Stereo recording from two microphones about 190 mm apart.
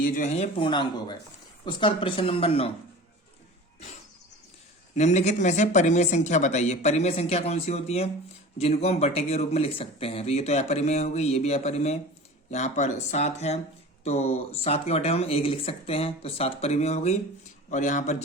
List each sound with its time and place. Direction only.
0.0 s speech: 45° left (ahead or behind)
4.9 s speech: 35° left (ahead or behind)